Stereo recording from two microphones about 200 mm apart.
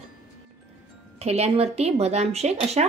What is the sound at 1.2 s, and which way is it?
Speech, 30° right (ahead or behind).